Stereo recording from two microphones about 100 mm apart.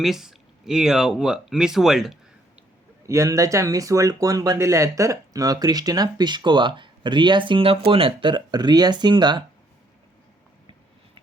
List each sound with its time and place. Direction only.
0.0 s speech: 5° right (ahead or behind)
3.1 s speech: 30° right (ahead or behind); by 9.4 s 50° right (ahead or behind)